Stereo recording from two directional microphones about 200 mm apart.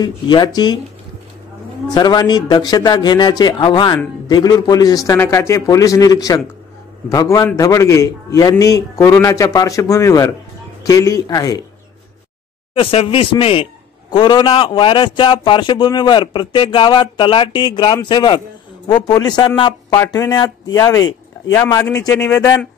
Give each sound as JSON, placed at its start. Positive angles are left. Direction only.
{"t": 0.0, "sound": "a man's voice", "side_deg": 20}
{"t": 2.0, "sound": "a man's voice", "side_deg": 20}
{"t": 12.7, "sound": "a man's voice", "side_deg": 25}